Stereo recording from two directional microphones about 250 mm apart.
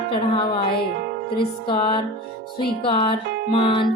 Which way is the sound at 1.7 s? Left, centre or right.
Centre.